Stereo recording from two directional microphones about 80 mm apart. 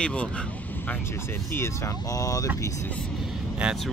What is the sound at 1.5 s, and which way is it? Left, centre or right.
Speech, left.